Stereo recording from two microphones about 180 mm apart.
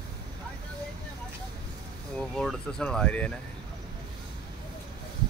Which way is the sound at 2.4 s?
5° left (ahead or behind).